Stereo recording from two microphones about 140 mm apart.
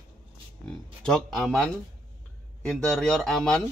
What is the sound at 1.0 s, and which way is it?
Speech, 5° left (ahead or behind).